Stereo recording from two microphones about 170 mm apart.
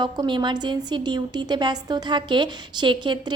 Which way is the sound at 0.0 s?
25° right (ahead or behind).